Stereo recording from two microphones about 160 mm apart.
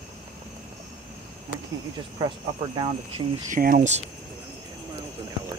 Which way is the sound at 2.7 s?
25° right (ahead or behind).